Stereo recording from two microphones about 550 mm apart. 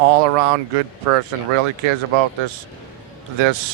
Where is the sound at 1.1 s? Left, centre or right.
Right.